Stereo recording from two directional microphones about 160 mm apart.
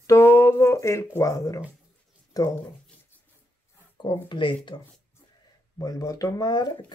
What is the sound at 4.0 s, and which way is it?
Speech, 30° left (ahead or behind).